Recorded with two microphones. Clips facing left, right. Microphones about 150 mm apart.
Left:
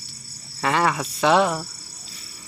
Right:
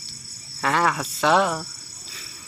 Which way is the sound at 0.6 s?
Centre (ahead or behind).